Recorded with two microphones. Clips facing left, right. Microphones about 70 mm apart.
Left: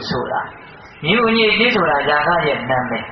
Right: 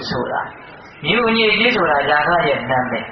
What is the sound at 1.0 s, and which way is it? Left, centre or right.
Speech, centre.